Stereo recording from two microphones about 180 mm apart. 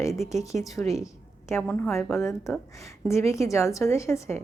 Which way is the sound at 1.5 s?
10° left (ahead or behind).